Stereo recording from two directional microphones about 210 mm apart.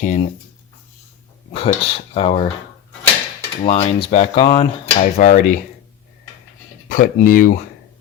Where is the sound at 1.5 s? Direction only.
30° left (ahead or behind).